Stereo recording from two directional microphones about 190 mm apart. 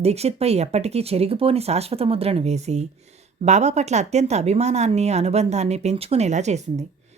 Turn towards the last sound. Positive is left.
turn(degrees=-35)  # may be behind; listen again after turning